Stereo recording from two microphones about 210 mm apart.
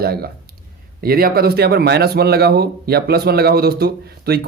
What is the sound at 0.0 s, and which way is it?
A man's voice, 45° right (ahead or behind).